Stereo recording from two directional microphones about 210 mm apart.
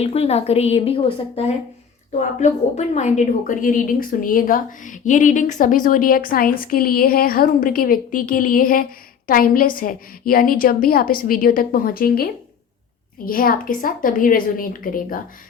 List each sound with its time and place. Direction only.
0.0 s a woman's voice: 30° left (ahead or behind)